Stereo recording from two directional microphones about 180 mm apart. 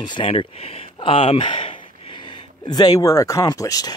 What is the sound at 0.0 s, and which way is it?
Speech, 25° left (ahead or behind).